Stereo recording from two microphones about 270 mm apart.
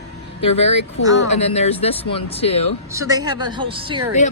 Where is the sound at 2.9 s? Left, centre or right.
Centre.